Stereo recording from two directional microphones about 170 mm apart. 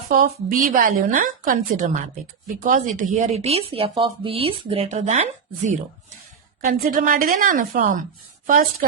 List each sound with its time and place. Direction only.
0.1 s a woman's voice: 55° right (ahead or behind)
6.7 s a woman's voice: 55° right (ahead or behind)